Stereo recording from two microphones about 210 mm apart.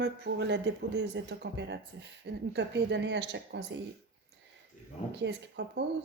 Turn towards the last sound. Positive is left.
turn(degrees=-55)  # may be behind; listen again after turning